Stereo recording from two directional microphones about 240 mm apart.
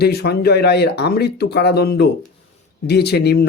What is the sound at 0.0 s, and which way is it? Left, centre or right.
A man's voice, left.